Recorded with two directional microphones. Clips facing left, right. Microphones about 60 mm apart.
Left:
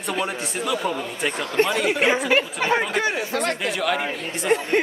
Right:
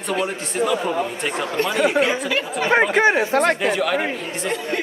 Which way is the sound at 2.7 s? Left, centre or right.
Right.